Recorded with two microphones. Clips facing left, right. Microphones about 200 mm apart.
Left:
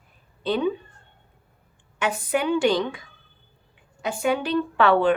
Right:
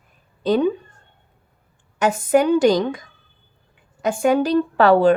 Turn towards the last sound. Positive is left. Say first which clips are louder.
# right 5 dB
turn(degrees=-40)  # may be behind; listen again after turning